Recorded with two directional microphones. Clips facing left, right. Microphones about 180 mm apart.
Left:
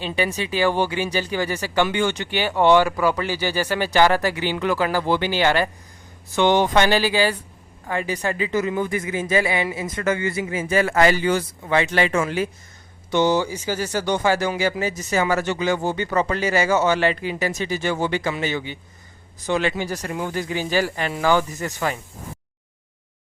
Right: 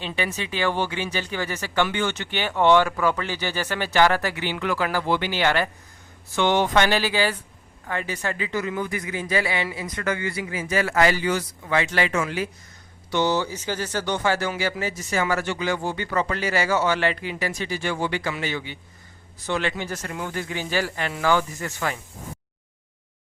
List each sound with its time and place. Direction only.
0.3 s speech: 35° left (ahead or behind)
0.5 s speech: 10° left (ahead or behind)
3.8 s speech: 35° left (ahead or behind)
6.3 s speech: 15° left (ahead or behind)
7.9 s speech: 15° left (ahead or behind)